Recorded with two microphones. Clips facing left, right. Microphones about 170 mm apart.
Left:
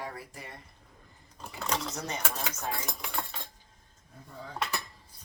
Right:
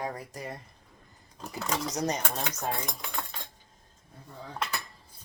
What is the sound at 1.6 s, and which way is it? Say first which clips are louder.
Speech: right 1 dB; 5° right (ahead or behind).